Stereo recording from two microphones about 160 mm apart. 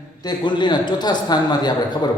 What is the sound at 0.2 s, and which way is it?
A man's voice, 25° left (ahead or behind).